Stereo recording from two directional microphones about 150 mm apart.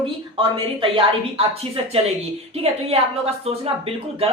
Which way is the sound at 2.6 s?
40° right (ahead or behind).